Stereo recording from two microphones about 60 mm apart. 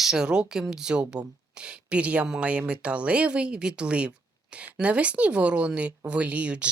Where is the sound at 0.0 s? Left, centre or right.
Centre.